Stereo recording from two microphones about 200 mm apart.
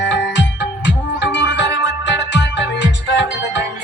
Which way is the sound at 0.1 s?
60° left (ahead or behind).